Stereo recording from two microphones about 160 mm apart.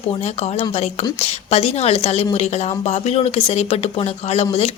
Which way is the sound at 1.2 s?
40° left (ahead or behind).